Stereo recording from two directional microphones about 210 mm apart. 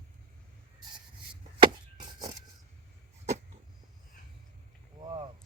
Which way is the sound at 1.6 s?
20° right (ahead or behind).